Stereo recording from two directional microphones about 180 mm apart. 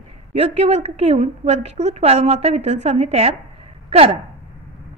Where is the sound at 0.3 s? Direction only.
35° right (ahead or behind).